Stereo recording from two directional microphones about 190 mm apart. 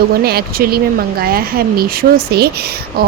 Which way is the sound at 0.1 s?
55° right (ahead or behind).